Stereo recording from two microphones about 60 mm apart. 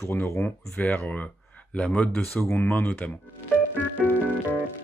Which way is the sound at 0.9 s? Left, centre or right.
Left.